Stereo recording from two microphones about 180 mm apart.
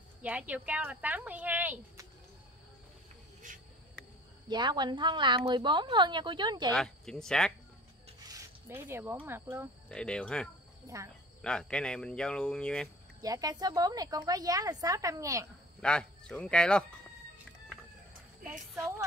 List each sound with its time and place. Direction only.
0.2 s speech: 10° right (ahead or behind)
4.5 s a woman's voice: 25° right (ahead or behind)
6.7 s speech: 5° left (ahead or behind)
8.2 s rub: 15° right (ahead or behind)
9.2 s speech: 15° right (ahead or behind)
9.8 s speech: 5° left (ahead or behind)
10.9 s a woman's voice: 20° right (ahead or behind)
11.4 s speech: 5° left (ahead or behind)
13.2 s a woman's voice: 20° right (ahead or behind)
15.8 s speech: 5° left (ahead or behind)